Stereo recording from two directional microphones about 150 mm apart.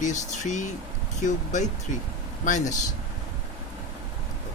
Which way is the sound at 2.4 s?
55° left (ahead or behind).